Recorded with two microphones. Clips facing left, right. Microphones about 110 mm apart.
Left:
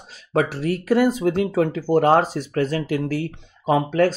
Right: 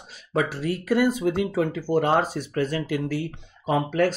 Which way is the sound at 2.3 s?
90° left.